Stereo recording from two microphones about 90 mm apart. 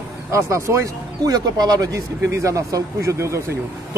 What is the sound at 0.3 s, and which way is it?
Speech, 35° right (ahead or behind).